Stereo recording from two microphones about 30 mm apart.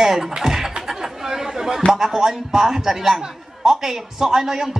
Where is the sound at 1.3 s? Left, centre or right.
Centre.